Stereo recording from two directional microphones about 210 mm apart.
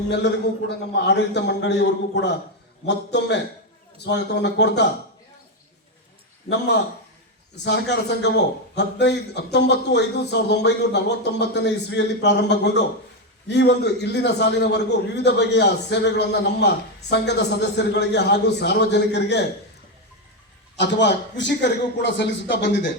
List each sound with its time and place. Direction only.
0.7 s speech: 55° left (ahead or behind)
7.5 s a man's voice: 55° left (ahead or behind)
20.7 s speech: 55° left (ahead or behind)